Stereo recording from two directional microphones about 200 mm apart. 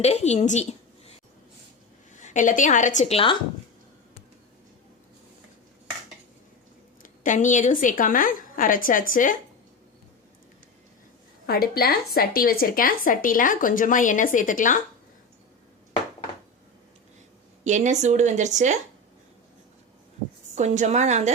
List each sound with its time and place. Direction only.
0.0 s a woman's voice: 35° left (ahead or behind)
2.1 s a woman's voice: 40° left (ahead or behind)
7.0 s speech: 40° left (ahead or behind)
11.4 s speech: 50° left (ahead or behind)
17.6 s speech: 35° right (ahead or behind)
20.6 s speech: 35° right (ahead or behind)